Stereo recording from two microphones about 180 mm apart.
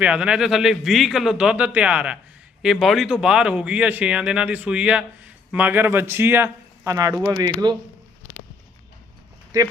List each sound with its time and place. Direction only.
0.0 s a man's voice: 5° right (ahead or behind); by 7.8 s 20° right (ahead or behind)
9.5 s speech: 20° right (ahead or behind)